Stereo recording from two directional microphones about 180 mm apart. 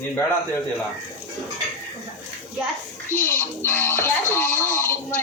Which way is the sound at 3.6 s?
15° left (ahead or behind).